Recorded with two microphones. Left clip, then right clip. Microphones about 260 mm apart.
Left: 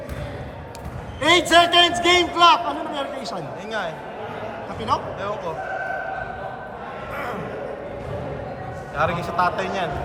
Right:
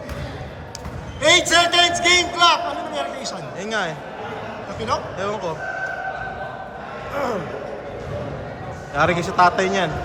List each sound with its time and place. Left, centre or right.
1.2 s a man's voice: centre
3.7 s a man's voice: right
4.9 s speech: centre
9.0 s a man's voice: right